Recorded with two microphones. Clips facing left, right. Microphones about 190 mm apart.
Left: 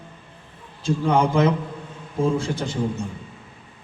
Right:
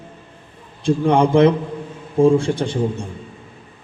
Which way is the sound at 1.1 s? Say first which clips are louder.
Right 5 dB; 30° right (ahead or behind).